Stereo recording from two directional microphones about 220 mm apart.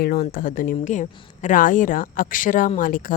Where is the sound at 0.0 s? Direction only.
40° left (ahead or behind).